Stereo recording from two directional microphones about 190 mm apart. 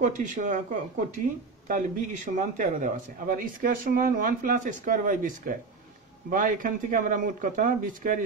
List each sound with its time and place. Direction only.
0.1 s a man's voice: 40° right (ahead or behind)